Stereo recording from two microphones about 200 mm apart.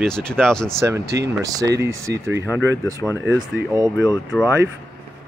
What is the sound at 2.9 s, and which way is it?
Speech, 15° left (ahead or behind).